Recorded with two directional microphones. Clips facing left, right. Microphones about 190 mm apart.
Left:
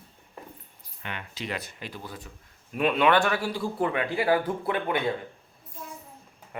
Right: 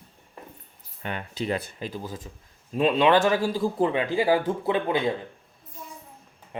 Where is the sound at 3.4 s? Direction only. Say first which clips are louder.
Right 5 dB; 40° right (ahead or behind).